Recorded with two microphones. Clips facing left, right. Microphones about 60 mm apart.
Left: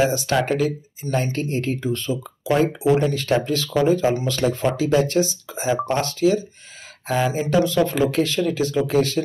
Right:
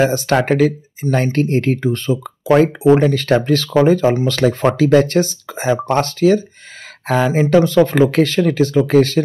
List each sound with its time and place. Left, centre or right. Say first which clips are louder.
0.0 s speech: right 5 dB; right
4.3 s speech: right 6 dB; right
7.4 s speech: right 8 dB; right